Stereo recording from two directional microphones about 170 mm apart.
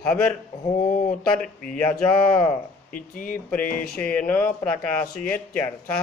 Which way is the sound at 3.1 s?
55° left (ahead or behind).